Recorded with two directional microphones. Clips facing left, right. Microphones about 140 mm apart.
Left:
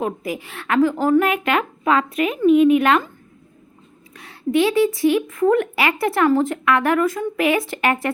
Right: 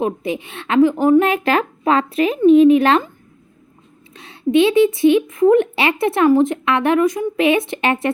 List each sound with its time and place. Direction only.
0.0 s a woman's voice: 25° right (ahead or behind)
1.3 s speech: 30° right (ahead or behind)
4.1 s a woman's voice: 25° right (ahead or behind)